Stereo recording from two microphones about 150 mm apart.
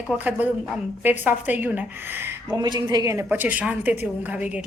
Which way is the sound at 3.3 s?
10° right (ahead or behind).